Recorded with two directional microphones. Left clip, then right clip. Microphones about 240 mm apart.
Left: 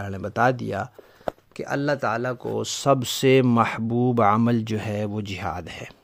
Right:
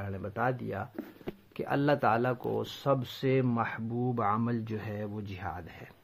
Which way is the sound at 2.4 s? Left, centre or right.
Left.